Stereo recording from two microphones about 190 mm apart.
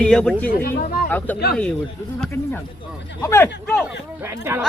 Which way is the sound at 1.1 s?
10° left (ahead or behind).